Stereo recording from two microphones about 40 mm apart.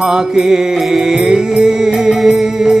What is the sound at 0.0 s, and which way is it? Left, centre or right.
Music, centre.